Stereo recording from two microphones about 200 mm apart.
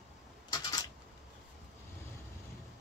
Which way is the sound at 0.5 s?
20° left (ahead or behind).